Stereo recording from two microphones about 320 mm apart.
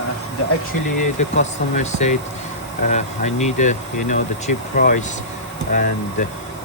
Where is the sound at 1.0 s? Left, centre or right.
Left.